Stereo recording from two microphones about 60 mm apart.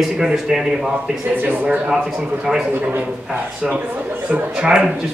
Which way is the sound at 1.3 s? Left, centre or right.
Right.